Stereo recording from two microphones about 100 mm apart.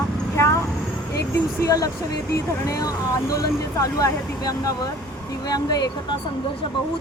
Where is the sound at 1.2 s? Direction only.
35° left (ahead or behind).